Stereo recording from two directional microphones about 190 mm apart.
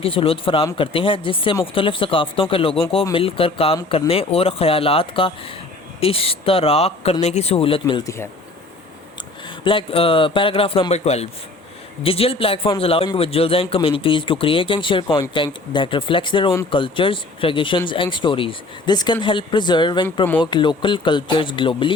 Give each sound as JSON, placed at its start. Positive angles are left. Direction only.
{"t": 0.0, "sound": "speech", "side_deg": 30}
{"t": 9.6, "sound": "speech", "side_deg": 30}